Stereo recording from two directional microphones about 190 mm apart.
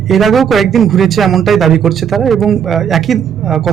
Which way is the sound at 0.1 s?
Centre (ahead or behind).